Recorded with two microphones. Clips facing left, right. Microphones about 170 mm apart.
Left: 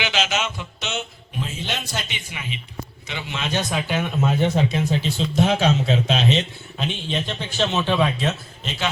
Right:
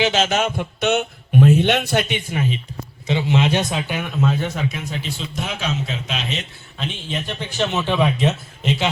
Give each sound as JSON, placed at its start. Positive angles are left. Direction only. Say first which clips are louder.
{"t": 0.0, "sound": "speech", "louder": "right 6 dB", "side_deg": -50}
{"t": 3.1, "sound": "speech", "louder": "right 10 dB", "side_deg": -25}
{"t": 4.2, "sound": "speech", "louder": "left 1 dB", "side_deg": 20}
{"t": 7.1, "sound": "a man's voice", "louder": "even", "side_deg": -15}